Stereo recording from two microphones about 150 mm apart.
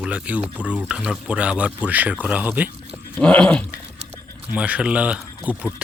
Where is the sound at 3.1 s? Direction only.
10° left (ahead or behind).